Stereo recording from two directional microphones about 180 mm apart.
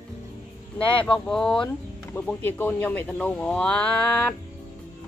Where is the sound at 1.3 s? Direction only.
5° left (ahead or behind).